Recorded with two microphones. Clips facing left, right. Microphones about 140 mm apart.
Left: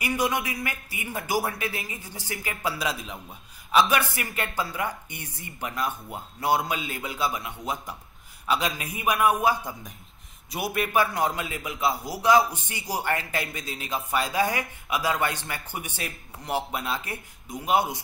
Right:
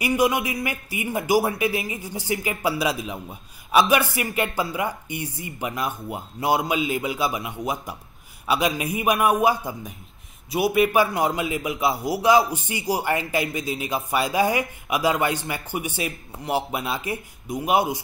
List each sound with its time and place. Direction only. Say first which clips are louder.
0.0 s a man's voice: right 5 dB; 10° right (ahead or behind)